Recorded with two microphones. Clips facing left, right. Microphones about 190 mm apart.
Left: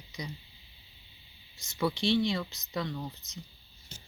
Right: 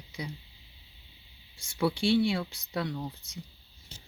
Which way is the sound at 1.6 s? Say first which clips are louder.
Right 2 dB; 10° right (ahead or behind).